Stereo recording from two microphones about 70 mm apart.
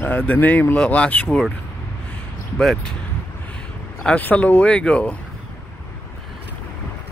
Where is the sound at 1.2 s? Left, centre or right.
Centre.